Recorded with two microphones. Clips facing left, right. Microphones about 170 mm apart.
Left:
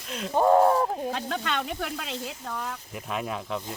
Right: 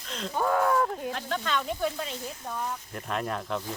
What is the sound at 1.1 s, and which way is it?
Speech, 75° left (ahead or behind).